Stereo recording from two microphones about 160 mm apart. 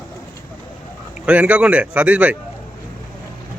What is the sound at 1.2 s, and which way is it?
A man's voice, 10° right (ahead or behind).